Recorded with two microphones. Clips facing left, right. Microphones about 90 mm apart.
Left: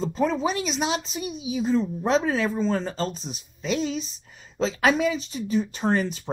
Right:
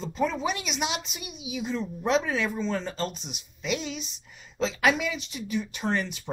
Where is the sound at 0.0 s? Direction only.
35° left (ahead or behind).